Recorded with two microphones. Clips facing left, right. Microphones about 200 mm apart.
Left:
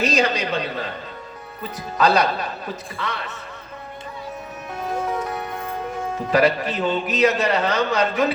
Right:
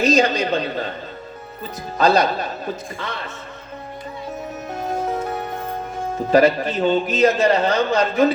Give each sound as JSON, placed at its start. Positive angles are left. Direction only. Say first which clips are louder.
{"t": 0.0, "sound": "a man's voice", "louder": "right 4 dB", "side_deg": -30}
{"t": 2.0, "sound": "a man's voice", "louder": "right 2 dB", "side_deg": -30}
{"t": 5.0, "sound": "music", "louder": "right 2 dB", "side_deg": -30}
{"t": 6.3, "sound": "a man's voice", "louder": "right 4 dB", "side_deg": -30}